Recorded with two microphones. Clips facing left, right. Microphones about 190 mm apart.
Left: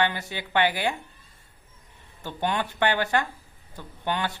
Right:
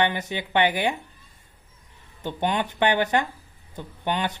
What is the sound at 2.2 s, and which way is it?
A woman's voice, 20° right (ahead or behind).